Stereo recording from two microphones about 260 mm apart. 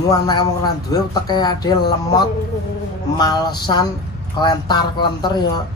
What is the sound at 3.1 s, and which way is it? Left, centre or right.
Speech, centre.